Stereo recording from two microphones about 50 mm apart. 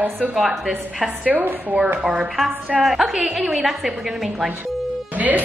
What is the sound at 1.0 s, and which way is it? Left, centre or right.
Speech, right.